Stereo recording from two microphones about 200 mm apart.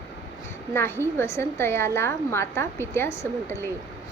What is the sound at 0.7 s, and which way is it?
A woman's voice, 10° left (ahead or behind).